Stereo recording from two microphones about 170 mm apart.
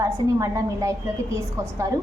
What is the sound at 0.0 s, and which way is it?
Speech, 20° right (ahead or behind).